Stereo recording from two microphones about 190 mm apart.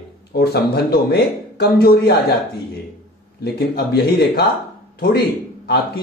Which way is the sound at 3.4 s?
55° left (ahead or behind).